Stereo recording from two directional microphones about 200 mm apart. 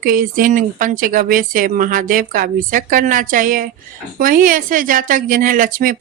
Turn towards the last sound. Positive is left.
turn(degrees=-45)  # may be behind; listen again after turning